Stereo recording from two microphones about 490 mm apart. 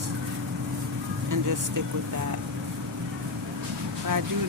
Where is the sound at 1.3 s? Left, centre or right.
Right.